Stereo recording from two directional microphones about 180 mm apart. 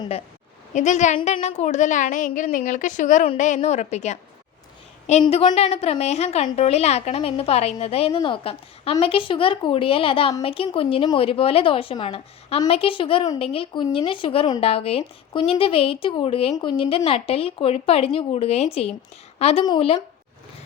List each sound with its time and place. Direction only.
0.7 s a woman's voice: 40° left (ahead or behind)
5.2 s a woman's voice: 25° left (ahead or behind)